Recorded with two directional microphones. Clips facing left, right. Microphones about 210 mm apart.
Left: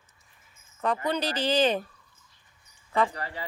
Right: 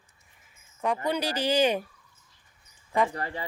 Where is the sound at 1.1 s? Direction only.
10° right (ahead or behind).